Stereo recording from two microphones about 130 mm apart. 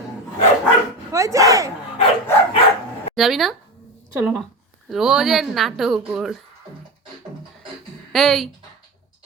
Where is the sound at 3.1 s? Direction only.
Centre (ahead or behind).